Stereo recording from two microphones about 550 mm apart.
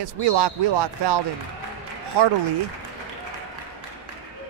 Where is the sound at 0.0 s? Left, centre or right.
Right.